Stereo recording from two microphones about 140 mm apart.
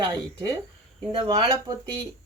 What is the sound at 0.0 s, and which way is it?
Speech, 25° right (ahead or behind).